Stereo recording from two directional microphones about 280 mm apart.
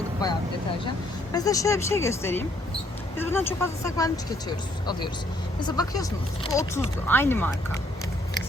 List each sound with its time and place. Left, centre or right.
0.9 s speech: centre